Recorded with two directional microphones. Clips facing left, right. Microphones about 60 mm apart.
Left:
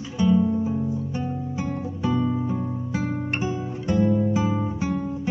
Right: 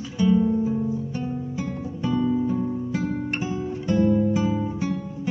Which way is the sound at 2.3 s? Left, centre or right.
Left.